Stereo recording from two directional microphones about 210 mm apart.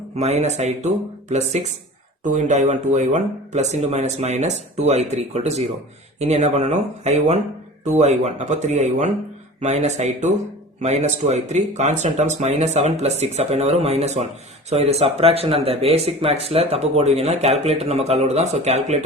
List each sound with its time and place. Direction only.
0.2 s speech: 30° right (ahead or behind)